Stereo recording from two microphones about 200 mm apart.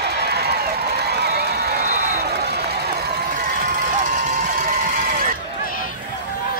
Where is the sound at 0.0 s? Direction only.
55° right (ahead or behind).